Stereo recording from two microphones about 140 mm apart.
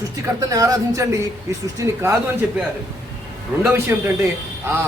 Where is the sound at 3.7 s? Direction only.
20° right (ahead or behind).